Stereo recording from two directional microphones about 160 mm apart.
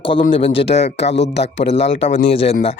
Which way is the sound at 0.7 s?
90° left.